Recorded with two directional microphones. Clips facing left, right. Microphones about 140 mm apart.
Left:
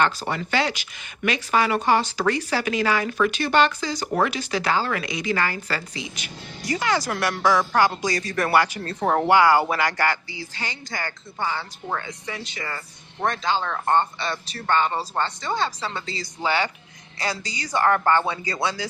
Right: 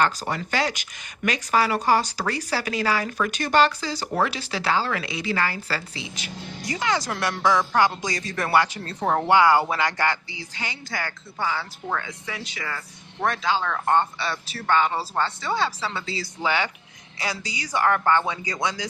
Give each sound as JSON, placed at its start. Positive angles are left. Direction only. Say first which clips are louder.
{"t": 0.0, "sound": "a woman's voice", "louder": "left 1 dB", "side_deg": -40}
{"t": 17.8, "sound": "speech", "louder": "left 1 dB", "side_deg": 10}
{"t": 18.3, "sound": "speech", "louder": "left 1 dB", "side_deg": -15}